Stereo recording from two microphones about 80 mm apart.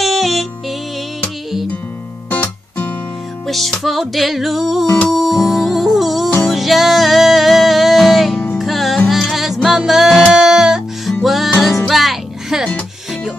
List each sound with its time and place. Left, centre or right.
0.0 s music: centre
2.2 s music: left
3.4 s music: centre